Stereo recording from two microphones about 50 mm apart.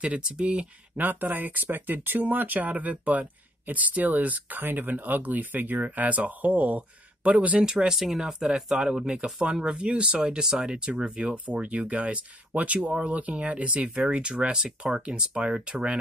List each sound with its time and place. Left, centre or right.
0.0 s speech: right
0.9 s speech: right
7.5 s speech: centre